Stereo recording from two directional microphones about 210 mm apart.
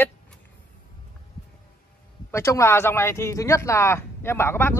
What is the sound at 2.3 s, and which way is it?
Speech, 15° left (ahead or behind).